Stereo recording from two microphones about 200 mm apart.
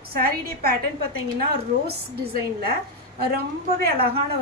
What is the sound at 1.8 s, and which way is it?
Speech, 50° right (ahead or behind).